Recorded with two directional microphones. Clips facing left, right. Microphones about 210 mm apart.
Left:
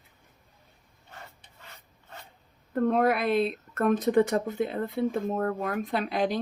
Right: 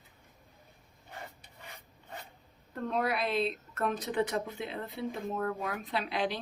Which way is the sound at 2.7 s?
55° left (ahead or behind).